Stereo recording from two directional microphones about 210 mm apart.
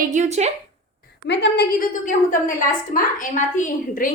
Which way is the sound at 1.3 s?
55° left (ahead or behind).